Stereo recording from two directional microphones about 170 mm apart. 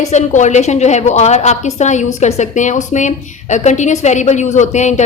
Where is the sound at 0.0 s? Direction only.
45° left (ahead or behind).